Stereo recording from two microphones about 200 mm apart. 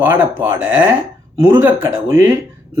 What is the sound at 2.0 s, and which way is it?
Speech, 15° right (ahead or behind).